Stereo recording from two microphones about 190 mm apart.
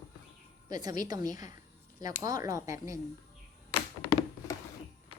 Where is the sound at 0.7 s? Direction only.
20° right (ahead or behind).